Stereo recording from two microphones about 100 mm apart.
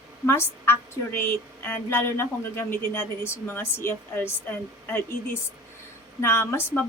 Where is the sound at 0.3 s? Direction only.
25° left (ahead or behind).